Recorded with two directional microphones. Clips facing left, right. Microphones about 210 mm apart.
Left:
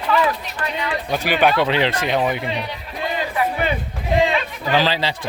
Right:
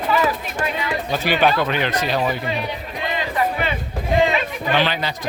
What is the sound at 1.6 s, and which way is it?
Speech, 25° left (ahead or behind).